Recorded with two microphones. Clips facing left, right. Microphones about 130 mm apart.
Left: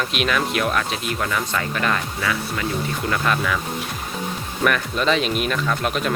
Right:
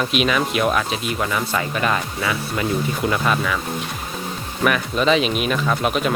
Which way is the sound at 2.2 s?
20° right (ahead or behind).